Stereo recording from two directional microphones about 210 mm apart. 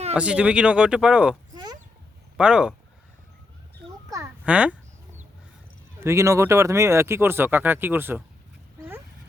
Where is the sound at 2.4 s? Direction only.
5° right (ahead or behind).